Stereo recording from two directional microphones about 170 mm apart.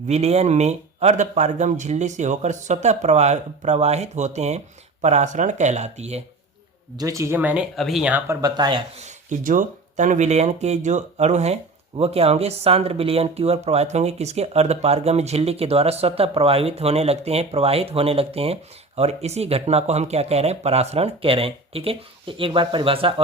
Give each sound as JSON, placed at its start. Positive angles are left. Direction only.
{"t": 0.1, "sound": "speech", "side_deg": -40}
{"t": 6.9, "sound": "speech", "side_deg": -20}
{"t": 8.4, "sound": "speech", "side_deg": -25}
{"t": 9.0, "sound": "speech", "side_deg": -45}